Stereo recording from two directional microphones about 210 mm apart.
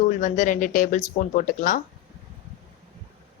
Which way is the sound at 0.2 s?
35° left (ahead or behind).